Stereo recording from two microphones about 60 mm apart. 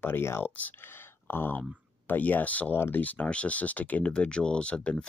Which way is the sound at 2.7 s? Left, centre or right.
Left.